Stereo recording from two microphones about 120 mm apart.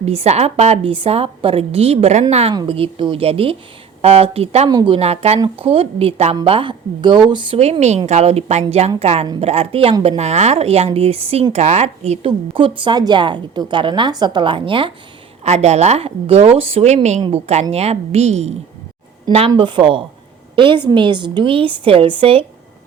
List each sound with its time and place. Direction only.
0.0 s a woman's voice: 60° right (ahead or behind)
2.5 s a woman's voice: 45° right (ahead or behind)
4.7 s a woman's voice: 35° right (ahead or behind)
4.9 s a woman's voice: 60° right (ahead or behind)
6.4 s a woman's voice: 50° right (ahead or behind)
7.6 s a woman's voice: 65° right (ahead or behind)
11.5 s a woman's voice: 70° right (ahead or behind)
12.5 s a woman's voice: 45° right (ahead or behind)
15.4 s a woman's voice: 65° right (ahead or behind)
19.5 s a woman's voice: 45° right (ahead or behind)